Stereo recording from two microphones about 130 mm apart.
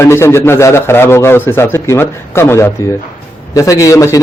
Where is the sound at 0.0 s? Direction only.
20° left (ahead or behind).